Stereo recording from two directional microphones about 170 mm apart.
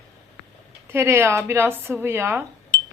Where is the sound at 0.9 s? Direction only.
15° right (ahead or behind).